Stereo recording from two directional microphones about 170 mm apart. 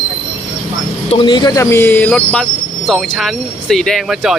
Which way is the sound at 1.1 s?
30° left (ahead or behind).